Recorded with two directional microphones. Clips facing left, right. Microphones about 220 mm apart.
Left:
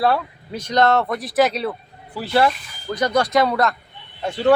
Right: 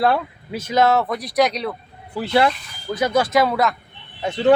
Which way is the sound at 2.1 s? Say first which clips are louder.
Right 1 dB; 20° right (ahead or behind).